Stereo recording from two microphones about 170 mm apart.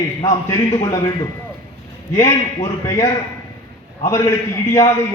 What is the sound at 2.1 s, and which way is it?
A man's voice, 20° left (ahead or behind).